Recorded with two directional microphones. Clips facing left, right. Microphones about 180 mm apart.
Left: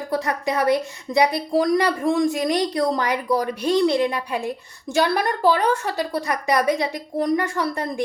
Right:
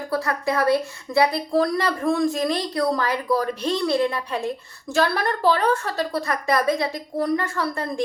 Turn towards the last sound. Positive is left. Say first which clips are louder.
# left 2 dB
turn(degrees=20)  # may be behind; listen again after turning